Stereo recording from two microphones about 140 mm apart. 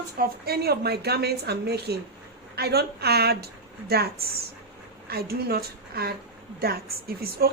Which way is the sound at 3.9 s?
90° right.